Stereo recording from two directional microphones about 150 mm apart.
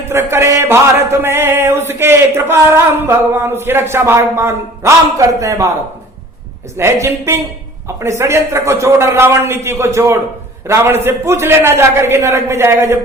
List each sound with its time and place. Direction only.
0.1 s speech: 15° right (ahead or behind)
6.7 s speech: 20° right (ahead or behind)